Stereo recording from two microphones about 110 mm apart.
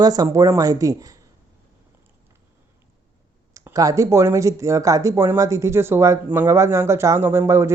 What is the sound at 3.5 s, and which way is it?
Speech, 30° right (ahead or behind).